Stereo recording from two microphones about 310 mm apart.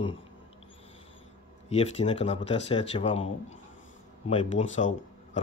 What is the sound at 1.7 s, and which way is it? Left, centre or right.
Speech, centre.